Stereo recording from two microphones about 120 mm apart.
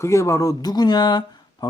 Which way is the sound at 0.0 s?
25° left (ahead or behind).